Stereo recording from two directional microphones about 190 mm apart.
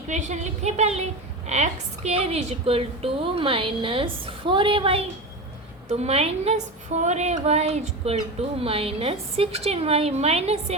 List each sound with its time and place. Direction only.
0.1 s a woman's voice: 40° right (ahead or behind)